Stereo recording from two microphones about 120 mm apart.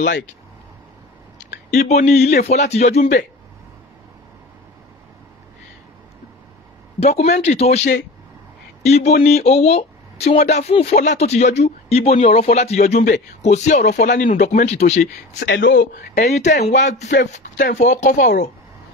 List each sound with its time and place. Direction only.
1.4 s speech: 75° left (ahead or behind)
7.0 s speech: 60° left (ahead or behind)
8.8 s speech: 65° left (ahead or behind)
11.0 s speech: 75° left (ahead or behind)
15.9 s speech: 80° left